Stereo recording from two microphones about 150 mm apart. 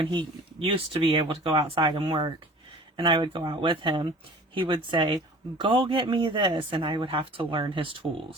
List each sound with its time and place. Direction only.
0.0 s speech: 35° right (ahead or behind)